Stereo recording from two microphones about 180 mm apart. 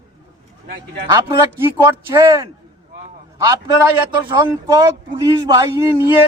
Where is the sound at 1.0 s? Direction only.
20° right (ahead or behind).